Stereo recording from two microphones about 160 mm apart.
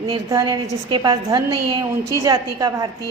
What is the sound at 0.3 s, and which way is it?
A woman's voice, 25° right (ahead or behind).